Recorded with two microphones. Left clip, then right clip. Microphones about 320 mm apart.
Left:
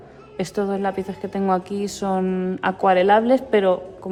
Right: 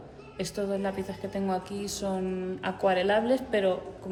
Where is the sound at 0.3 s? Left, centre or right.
Left.